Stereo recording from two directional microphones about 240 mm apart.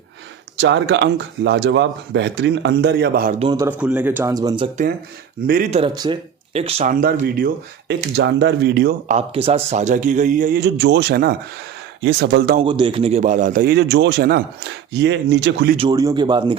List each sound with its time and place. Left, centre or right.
0.6 s speech: right
3.6 s a man's voice: centre
5.5 s speech: right
5.8 s speech: centre
6.9 s speech: right
12.5 s speech: centre; by 15.7 s right
15.8 s a man's voice: centre